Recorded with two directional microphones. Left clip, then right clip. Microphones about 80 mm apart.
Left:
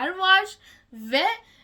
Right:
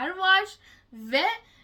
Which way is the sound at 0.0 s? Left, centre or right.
Left.